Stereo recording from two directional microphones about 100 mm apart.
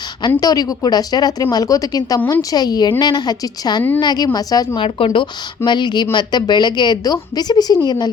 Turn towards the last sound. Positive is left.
turn(degrees=40)  # may be behind; listen again after turning